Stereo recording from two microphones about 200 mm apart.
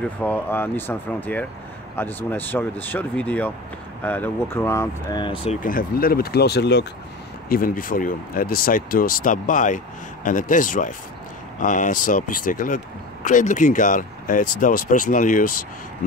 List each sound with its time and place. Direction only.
0.2 s speech: 10° left (ahead or behind); by 5.6 s 30° left (ahead or behind)
5.6 s speech: 45° left (ahead or behind)
7.4 s speech: 45° left (ahead or behind)